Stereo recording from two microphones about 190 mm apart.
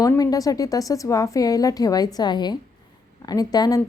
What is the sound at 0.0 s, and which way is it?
A woman's voice, 20° left (ahead or behind).